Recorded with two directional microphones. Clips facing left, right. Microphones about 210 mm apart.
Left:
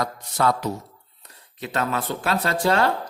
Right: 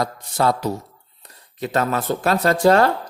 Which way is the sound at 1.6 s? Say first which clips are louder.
Right 4 dB; 40° right (ahead or behind).